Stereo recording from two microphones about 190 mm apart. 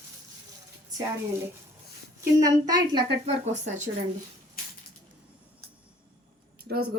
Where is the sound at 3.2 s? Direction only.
40° right (ahead or behind).